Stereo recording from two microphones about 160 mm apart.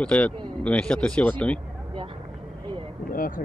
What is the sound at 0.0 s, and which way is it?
Speech, 5° left (ahead or behind).